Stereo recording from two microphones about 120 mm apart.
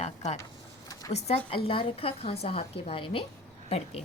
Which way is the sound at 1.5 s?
45° left (ahead or behind).